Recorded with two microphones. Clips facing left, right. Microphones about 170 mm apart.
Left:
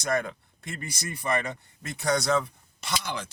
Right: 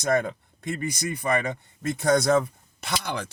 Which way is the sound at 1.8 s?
55° right (ahead or behind).